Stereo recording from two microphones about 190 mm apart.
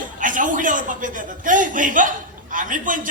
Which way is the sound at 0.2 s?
45° right (ahead or behind).